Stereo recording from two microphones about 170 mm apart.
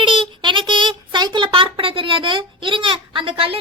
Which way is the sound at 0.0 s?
30° right (ahead or behind).